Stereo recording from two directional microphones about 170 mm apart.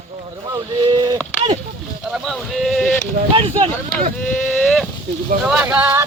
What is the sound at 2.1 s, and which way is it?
Speech, centre (ahead or behind).